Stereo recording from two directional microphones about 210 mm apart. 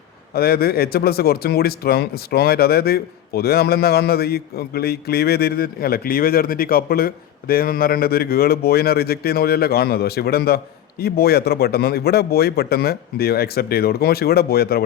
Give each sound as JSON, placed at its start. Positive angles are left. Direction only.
{"t": 0.3, "sound": "speech", "side_deg": 45}